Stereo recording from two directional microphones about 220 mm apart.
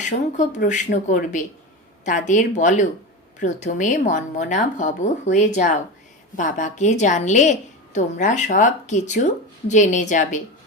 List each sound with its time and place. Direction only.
0.0 s speech: 35° left (ahead or behind)